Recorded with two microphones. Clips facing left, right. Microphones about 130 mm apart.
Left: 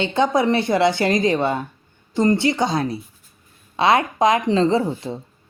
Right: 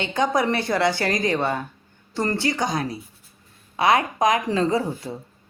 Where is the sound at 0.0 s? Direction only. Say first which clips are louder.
Left 3 dB; 25° left (ahead or behind).